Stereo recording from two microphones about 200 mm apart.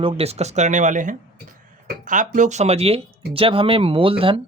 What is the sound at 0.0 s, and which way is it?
Speech, 30° right (ahead or behind).